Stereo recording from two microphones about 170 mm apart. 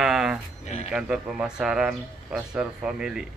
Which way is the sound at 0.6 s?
40° left (ahead or behind).